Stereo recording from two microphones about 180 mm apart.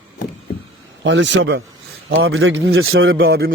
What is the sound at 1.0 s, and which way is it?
A man's voice, 85° right.